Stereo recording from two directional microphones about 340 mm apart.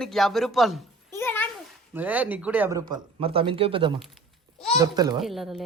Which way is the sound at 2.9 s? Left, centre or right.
Centre.